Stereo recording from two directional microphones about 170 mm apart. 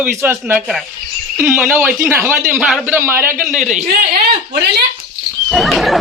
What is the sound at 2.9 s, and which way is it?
Speech, 15° right (ahead or behind).